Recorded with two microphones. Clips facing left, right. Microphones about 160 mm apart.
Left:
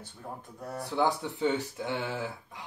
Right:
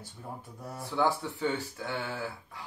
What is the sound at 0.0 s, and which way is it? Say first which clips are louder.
Speech: left 1 dB; 10° right (ahead or behind).